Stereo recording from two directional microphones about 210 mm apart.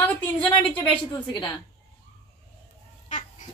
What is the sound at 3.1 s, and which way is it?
Cat, 35° left (ahead or behind).